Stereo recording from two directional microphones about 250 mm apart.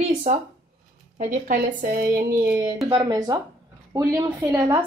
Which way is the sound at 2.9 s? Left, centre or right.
Centre.